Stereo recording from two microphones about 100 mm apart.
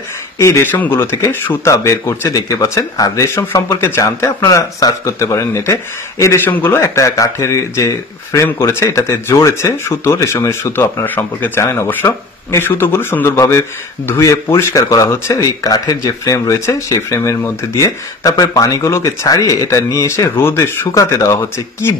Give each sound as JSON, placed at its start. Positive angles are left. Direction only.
{"t": 0.4, "sound": "speech", "side_deg": 25}